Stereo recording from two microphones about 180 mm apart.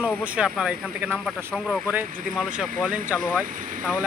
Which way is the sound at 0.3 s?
5° right (ahead or behind).